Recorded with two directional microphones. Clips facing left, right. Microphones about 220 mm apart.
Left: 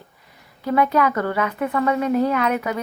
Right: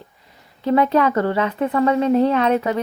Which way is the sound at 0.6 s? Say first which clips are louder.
Right 3 dB; 25° right (ahead or behind).